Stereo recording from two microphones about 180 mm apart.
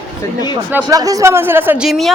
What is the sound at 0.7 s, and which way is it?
Speech, 15° right (ahead or behind).